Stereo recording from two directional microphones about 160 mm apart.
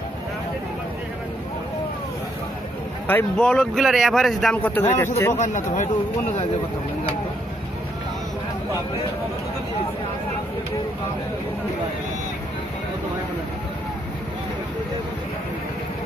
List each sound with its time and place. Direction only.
3.1 s speech: 10° left (ahead or behind)
4.6 s a man's voice: 10° left (ahead or behind)
5.4 s speech: 50° left (ahead or behind)